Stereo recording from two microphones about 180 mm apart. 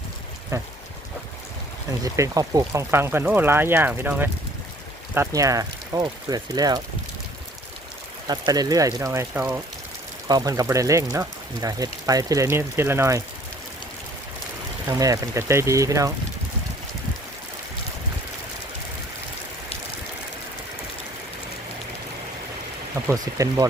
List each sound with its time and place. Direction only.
0.5 s speech: 15° right (ahead or behind)
1.9 s speech: 15° right (ahead or behind)
8.3 s speech: 20° right (ahead or behind)
14.8 s speech: 20° right (ahead or behind)
23.0 s speech: 20° right (ahead or behind)